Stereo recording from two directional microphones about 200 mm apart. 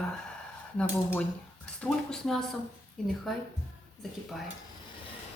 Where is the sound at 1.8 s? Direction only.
Centre (ahead or behind).